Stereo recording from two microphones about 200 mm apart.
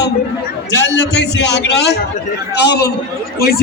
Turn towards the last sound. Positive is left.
turn(degrees=50)  # may be behind; listen again after turning